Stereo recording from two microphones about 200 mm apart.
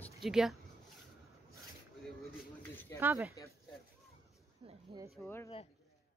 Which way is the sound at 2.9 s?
10° right (ahead or behind).